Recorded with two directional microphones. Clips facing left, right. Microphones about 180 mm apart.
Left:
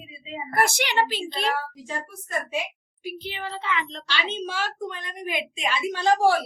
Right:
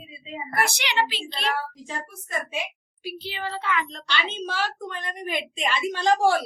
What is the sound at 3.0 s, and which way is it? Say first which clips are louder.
Speech: right 1 dB; 20° left (ahead or behind).